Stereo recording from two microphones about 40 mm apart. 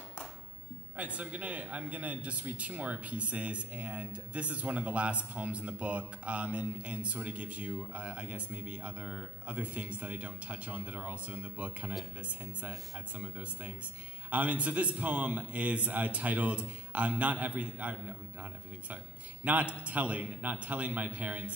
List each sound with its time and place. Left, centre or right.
0.9 s speech: right